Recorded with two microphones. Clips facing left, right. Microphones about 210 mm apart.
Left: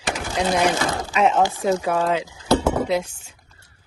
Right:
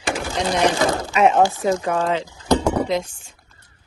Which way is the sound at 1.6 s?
5° left (ahead or behind).